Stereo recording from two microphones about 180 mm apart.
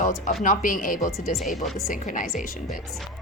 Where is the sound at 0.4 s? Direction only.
50° left (ahead or behind).